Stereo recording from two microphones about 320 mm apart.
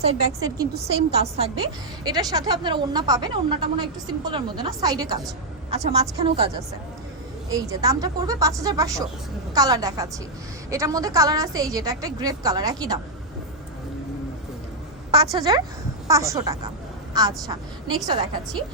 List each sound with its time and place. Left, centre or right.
0.0 s a woman's voice: centre
0.7 s a woman's voice: right
1.1 s a woman's voice: centre
15.4 s a woman's voice: centre